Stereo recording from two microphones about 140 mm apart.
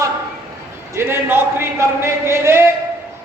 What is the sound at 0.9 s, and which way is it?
A man's voice, 15° right (ahead or behind).